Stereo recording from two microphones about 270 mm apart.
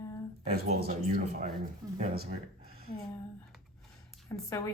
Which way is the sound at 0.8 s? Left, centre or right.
Right.